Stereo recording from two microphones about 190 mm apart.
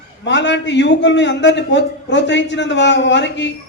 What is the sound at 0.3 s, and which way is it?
A man's voice, 70° left (ahead or behind).